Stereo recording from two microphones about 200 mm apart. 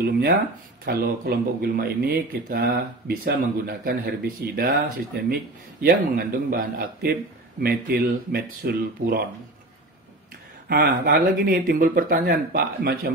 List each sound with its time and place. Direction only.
0.8 s speech: 50° right (ahead or behind)
10.7 s speech: 45° right (ahead or behind)